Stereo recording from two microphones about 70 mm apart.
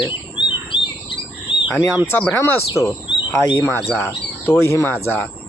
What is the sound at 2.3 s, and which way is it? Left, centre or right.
Speech, left.